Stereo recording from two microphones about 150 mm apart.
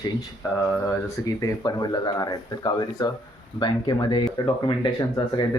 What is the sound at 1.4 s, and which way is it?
Speech, 25° left (ahead or behind).